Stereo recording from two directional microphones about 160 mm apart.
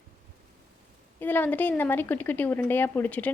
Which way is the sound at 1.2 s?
10° left (ahead or behind).